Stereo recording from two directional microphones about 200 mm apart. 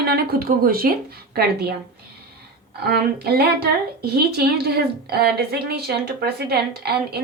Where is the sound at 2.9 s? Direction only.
50° right (ahead or behind).